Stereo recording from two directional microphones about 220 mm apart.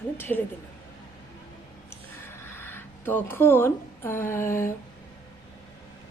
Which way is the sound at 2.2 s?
10° left (ahead or behind).